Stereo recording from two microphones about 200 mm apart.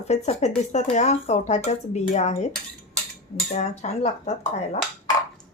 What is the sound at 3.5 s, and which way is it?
Speech, 35° left (ahead or behind).